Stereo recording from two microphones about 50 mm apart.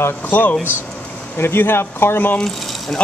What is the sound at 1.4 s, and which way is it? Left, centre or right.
Speech, left.